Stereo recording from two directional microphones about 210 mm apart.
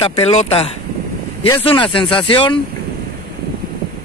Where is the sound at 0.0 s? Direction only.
25° left (ahead or behind).